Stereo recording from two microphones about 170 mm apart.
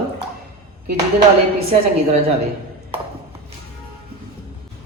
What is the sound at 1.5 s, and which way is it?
Speech, 35° right (ahead or behind).